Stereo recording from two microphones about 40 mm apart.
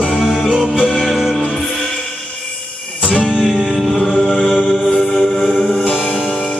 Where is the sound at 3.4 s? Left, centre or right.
Centre.